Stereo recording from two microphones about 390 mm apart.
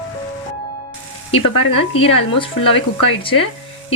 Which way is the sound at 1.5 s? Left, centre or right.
Left.